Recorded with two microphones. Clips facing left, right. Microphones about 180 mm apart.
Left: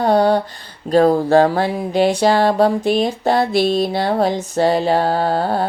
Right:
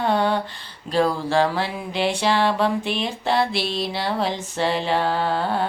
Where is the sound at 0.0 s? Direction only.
40° left (ahead or behind).